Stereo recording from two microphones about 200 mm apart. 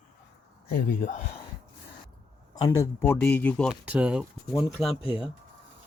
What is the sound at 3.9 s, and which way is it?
Speech, 5° right (ahead or behind).